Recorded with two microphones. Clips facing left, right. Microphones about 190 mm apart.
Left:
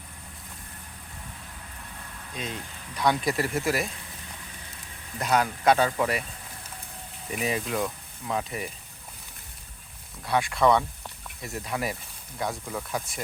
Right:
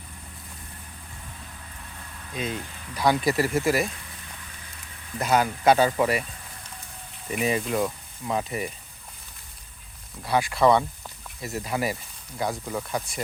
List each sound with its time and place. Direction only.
2.3 s speech: 5° right (ahead or behind)
5.2 s speech: centre (ahead or behind)
7.3 s speech: centre (ahead or behind)
10.2 s speech: centre (ahead or behind)